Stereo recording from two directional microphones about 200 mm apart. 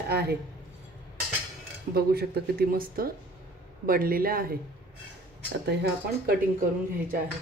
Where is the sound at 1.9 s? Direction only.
50° right (ahead or behind).